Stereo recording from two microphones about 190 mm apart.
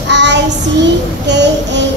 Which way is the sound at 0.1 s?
65° right (ahead or behind).